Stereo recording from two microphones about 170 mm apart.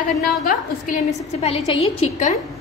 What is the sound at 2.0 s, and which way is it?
Speech, 45° left (ahead or behind).